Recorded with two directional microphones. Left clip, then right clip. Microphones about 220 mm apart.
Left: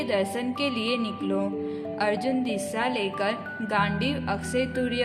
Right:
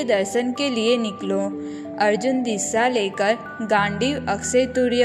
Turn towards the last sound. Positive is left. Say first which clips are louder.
# right 8 dB
turn(degrees=-20)  # may be behind; listen again after turning